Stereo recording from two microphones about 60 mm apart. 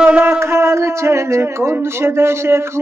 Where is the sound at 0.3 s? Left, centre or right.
Right.